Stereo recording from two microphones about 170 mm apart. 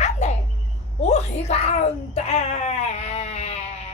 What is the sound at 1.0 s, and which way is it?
Speech, 40° left (ahead or behind).